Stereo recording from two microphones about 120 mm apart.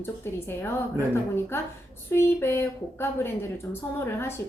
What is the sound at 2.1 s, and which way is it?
A woman's voice, 20° left (ahead or behind).